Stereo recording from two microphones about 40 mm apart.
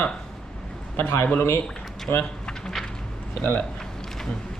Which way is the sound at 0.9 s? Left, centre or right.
Left.